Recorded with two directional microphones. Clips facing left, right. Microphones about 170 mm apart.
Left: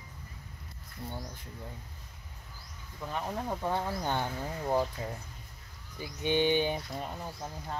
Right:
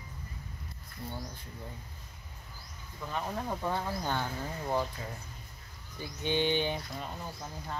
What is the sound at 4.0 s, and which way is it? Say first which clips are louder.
Speech: left 1 dB; 20° left (ahead or behind).